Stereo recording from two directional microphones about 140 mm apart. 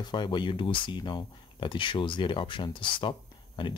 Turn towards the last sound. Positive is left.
turn(degrees=35)  # may be behind; listen again after turning